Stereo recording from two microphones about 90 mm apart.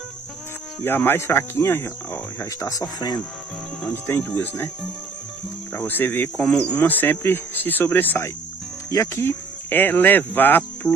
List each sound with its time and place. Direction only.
0.8 s speech: 25° left (ahead or behind)
2.6 s speech: 45° left (ahead or behind)
3.9 s speech: 25° left (ahead or behind)
5.8 s speech: 25° left (ahead or behind)
8.9 s speech: 35° left (ahead or behind)